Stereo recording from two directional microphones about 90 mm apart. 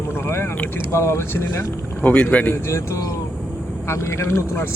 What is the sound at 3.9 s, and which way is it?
Speech, 30° left (ahead or behind).